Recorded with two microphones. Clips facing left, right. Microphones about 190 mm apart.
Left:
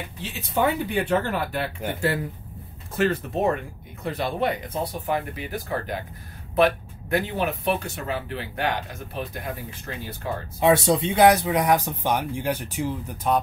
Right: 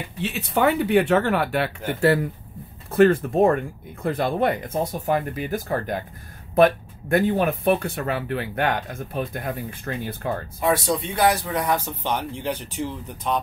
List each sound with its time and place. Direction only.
0.2 s speech: 65° right (ahead or behind)
2.9 s speech: 55° right (ahead or behind)
10.6 s speech: 25° left (ahead or behind); by 13.4 s 10° left (ahead or behind)